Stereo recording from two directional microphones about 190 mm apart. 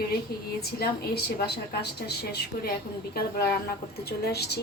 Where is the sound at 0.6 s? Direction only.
55° left (ahead or behind).